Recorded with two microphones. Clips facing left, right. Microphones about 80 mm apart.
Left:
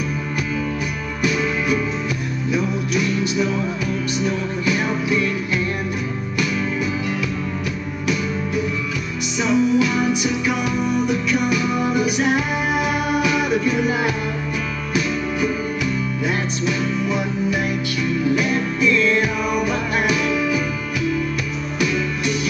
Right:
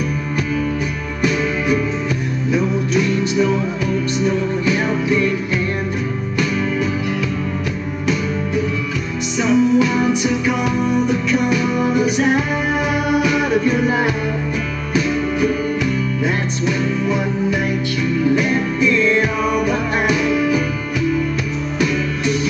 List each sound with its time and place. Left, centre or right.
2.5 s music: right
9.4 s music: right
13.2 s music: right
16.6 s music: right
19.0 s music: centre
20.3 s music: right
21.7 s music: right